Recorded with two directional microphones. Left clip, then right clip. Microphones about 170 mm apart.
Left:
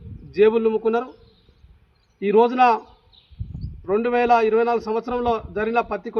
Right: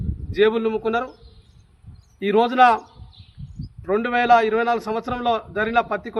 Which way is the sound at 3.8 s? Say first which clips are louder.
Even; 20° right (ahead or behind).